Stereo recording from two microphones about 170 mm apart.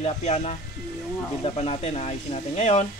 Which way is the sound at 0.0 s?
40° left (ahead or behind).